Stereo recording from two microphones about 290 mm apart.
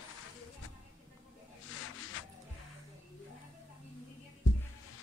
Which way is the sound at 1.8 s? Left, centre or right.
Left.